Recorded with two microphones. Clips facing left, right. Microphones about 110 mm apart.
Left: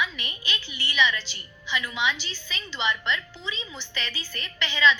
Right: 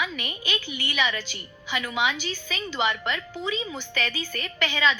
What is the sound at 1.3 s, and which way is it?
A woman's voice, 50° right (ahead or behind).